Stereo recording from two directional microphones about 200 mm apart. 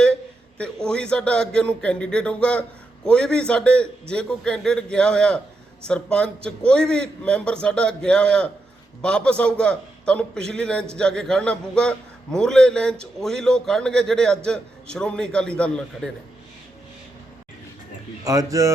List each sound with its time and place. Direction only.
0.6 s a man's voice: 5° left (ahead or behind)
18.3 s speech: 15° right (ahead or behind)